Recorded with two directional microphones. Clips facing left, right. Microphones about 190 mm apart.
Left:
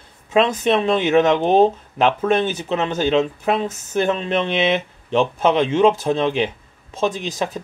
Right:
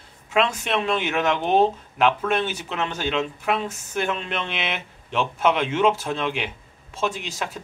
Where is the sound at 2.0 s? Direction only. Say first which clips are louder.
Left 4 dB; 40° left (ahead or behind).